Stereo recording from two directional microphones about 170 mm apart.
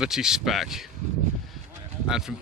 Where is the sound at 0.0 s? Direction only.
5° right (ahead or behind).